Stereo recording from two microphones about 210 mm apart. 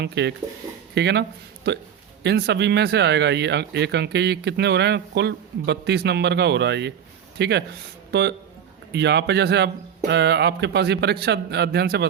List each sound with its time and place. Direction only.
0.0 s speech: 55° right (ahead or behind)